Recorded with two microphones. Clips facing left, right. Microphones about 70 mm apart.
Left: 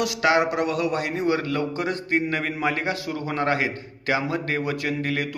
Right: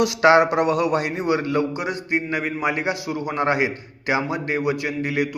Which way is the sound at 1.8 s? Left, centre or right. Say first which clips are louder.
Even; centre.